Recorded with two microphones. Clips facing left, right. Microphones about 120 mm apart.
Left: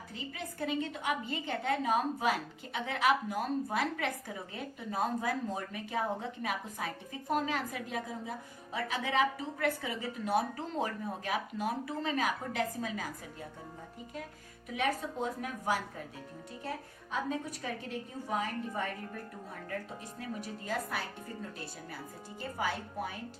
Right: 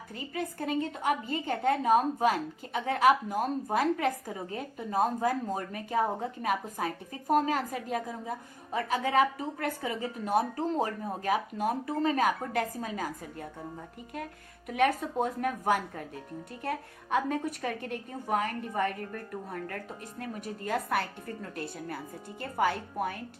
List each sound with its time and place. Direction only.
0.1 s a woman's voice: 45° right (ahead or behind)
14.7 s a woman's voice: 55° right (ahead or behind)
20.1 s a woman's voice: 50° right (ahead or behind)